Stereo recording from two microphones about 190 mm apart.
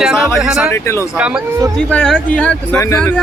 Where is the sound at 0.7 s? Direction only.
15° left (ahead or behind).